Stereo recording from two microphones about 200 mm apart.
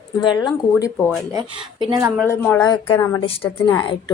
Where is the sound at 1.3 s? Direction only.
25° right (ahead or behind).